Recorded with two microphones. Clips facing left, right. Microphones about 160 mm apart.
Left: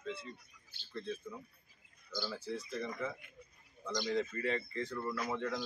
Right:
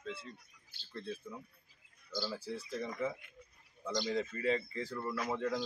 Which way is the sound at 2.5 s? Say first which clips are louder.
Even; 10° right (ahead or behind).